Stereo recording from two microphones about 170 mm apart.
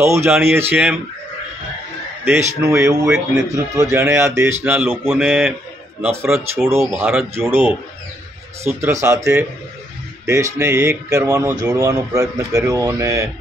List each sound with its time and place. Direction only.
0.0 s speech: 15° right (ahead or behind)
2.2 s speech: 15° right (ahead or behind)